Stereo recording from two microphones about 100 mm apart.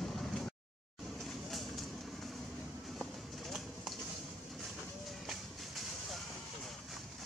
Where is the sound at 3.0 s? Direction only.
Centre (ahead or behind).